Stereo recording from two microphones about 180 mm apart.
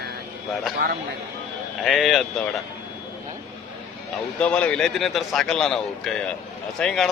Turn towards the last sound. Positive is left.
turn(degrees=5)  # may be behind; listen again after turning